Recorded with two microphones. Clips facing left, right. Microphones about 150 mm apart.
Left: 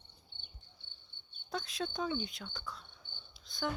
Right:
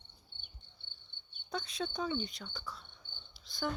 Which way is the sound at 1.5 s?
Centre (ahead or behind).